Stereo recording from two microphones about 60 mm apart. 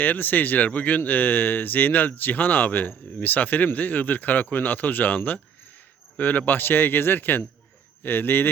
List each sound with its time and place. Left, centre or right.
0.0 s speech: left